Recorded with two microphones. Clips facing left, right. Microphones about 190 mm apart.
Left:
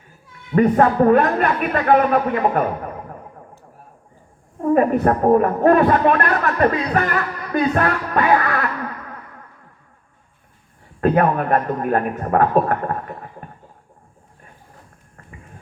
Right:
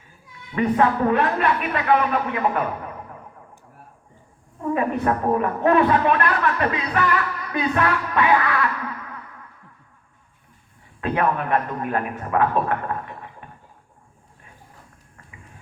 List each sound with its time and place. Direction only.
0.5 s speech: 45° left (ahead or behind)
4.6 s a woman's voice: 45° left (ahead or behind)
11.0 s speech: 45° left (ahead or behind)